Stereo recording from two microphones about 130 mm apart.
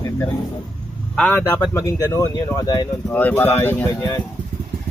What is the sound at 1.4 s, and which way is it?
Speech, 15° left (ahead or behind).